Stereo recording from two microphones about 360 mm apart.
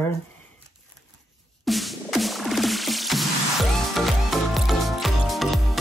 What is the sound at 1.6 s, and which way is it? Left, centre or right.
Music, centre.